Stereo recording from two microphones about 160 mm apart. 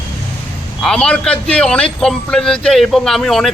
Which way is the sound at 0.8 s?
5° left (ahead or behind).